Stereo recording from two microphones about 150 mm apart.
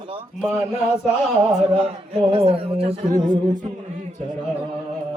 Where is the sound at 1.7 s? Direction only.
40° right (ahead or behind).